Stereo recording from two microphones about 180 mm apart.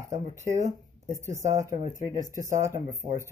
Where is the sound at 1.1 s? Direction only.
15° right (ahead or behind).